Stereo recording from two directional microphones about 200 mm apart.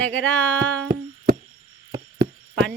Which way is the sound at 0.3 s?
10° left (ahead or behind).